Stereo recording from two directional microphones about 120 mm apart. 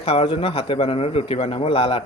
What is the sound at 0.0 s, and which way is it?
Speech, 55° left (ahead or behind).